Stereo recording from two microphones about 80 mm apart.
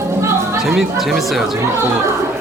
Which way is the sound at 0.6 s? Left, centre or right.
Centre.